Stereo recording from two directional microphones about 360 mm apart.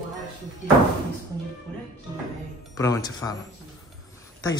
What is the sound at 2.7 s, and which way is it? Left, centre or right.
Speech, centre.